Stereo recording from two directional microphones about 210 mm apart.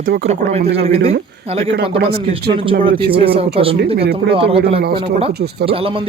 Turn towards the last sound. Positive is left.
turn(degrees=-25)  # may be behind; listen again after turning